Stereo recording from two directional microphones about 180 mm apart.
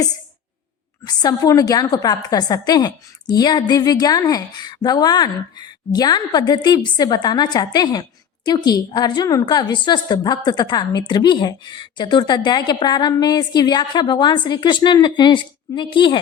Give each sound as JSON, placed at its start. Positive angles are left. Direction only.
{"t": 1.0, "sound": "a woman's voice", "side_deg": 20}